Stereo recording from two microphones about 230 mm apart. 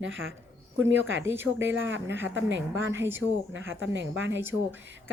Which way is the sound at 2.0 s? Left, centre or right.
Centre.